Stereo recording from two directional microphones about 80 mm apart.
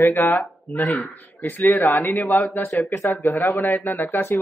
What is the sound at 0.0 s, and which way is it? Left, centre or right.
Speech, left.